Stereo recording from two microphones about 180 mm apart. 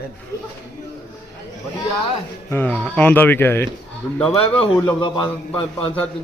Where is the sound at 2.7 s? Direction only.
5° left (ahead or behind).